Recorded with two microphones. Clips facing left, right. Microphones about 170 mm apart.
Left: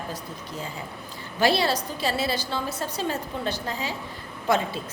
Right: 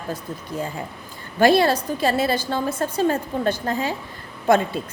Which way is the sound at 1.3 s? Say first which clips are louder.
Right 6 dB; 50° right (ahead or behind).